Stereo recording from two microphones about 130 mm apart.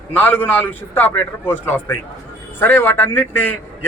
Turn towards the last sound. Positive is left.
turn(degrees=15)  # may be behind; listen again after turning